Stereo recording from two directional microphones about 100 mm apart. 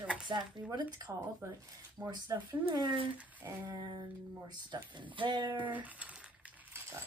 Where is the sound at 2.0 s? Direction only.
40° right (ahead or behind).